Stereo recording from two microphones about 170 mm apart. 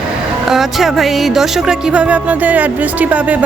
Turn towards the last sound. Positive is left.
turn(degrees=-10)  # may be behind; listen again after turning